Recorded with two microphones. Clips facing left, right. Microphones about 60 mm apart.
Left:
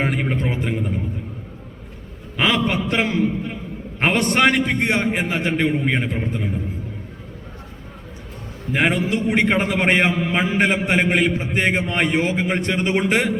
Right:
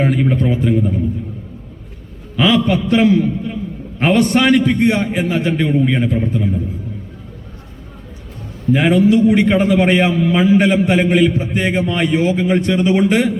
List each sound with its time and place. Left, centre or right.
0.0 s a man's voice: left
2.3 s a man's voice: left
8.7 s a man's voice: left